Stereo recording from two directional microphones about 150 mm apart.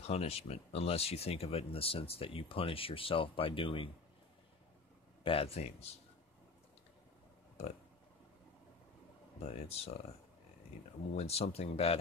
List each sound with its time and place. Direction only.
0.0 s speech: 45° left (ahead or behind)
5.2 s speech: 40° left (ahead or behind)
9.4 s speech: 45° left (ahead or behind)
11.1 s speech: 45° left (ahead or behind)